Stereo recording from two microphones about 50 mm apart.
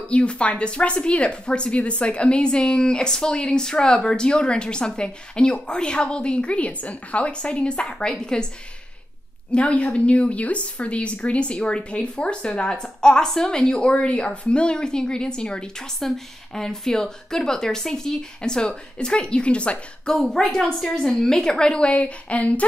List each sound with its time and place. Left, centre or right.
0.1 s a woman's voice: left
9.5 s a woman's voice: left
20.2 s a woman's voice: centre; by 22.7 s left